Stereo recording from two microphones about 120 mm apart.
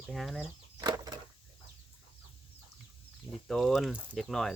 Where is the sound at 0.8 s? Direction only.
30° right (ahead or behind).